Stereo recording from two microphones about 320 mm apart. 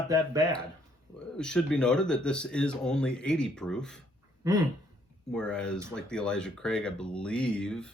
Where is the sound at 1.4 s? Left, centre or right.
Centre.